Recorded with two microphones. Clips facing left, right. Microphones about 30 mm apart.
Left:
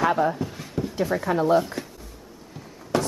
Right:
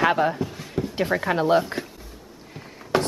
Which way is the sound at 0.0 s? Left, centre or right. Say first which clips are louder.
Right 1 dB; right.